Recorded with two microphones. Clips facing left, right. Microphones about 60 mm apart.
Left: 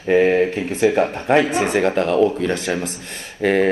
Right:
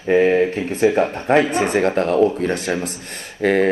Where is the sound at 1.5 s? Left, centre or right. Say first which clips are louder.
Even; right.